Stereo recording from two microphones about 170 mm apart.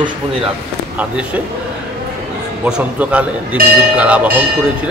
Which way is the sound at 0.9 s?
10° right (ahead or behind).